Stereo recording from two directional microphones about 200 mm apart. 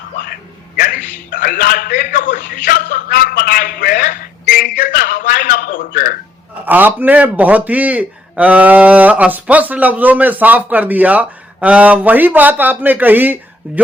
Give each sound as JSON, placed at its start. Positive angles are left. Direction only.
{"t": 0.8, "sound": "a sound", "side_deg": 45}
{"t": 1.3, "sound": "a man's voice", "side_deg": 45}
{"t": 6.7, "sound": "a man's voice", "side_deg": -10}